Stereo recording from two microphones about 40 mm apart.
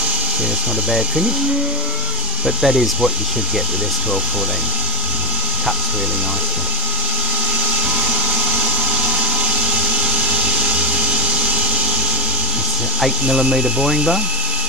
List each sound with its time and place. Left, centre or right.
2.4 s speech: centre
8.1 s a sound: right
13.3 s ratchet: centre